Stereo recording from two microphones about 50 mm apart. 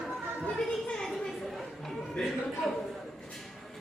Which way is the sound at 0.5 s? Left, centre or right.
Centre.